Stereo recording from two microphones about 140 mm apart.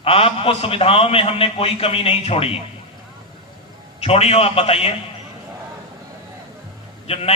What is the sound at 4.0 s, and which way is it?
Speech, 45° left (ahead or behind).